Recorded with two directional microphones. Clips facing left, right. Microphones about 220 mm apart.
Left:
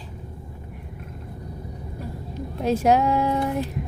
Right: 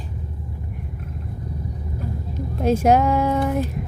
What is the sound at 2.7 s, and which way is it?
Speech, 50° right (ahead or behind).